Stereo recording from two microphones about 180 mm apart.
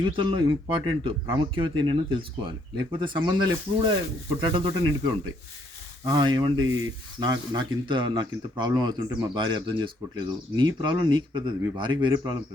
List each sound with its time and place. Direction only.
0.0 s speech: 25° right (ahead or behind)